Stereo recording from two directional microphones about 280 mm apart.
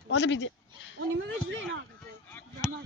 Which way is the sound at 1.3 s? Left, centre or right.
Right.